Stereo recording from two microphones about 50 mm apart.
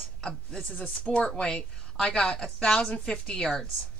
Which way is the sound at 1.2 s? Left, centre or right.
Centre.